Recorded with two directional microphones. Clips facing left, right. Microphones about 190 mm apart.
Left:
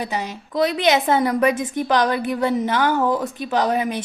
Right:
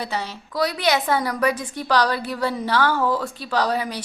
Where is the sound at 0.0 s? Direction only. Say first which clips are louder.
Left 2 dB; 15° left (ahead or behind).